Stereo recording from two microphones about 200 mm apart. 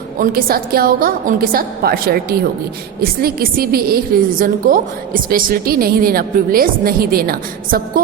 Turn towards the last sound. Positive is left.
turn(degrees=-50)  # may be behind; listen again after turning